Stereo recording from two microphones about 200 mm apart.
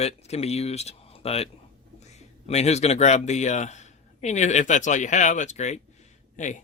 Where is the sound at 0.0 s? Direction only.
30° left (ahead or behind).